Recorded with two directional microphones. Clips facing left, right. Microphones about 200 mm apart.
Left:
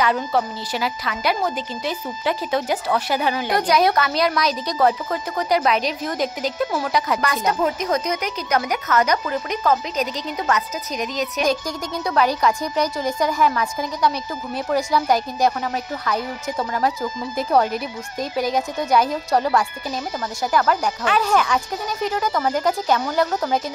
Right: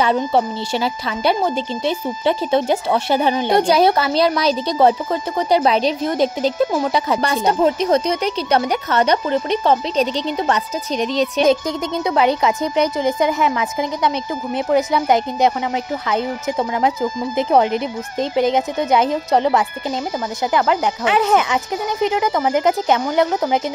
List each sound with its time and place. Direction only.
0.0 s a woman's voice: 25° right (ahead or behind)